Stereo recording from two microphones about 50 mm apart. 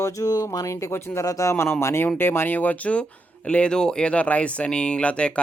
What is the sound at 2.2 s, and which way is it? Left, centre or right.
Speech, left.